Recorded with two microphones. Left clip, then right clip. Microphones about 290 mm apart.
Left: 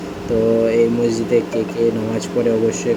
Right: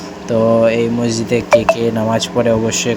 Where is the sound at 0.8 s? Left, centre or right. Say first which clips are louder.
Left 1 dB; centre.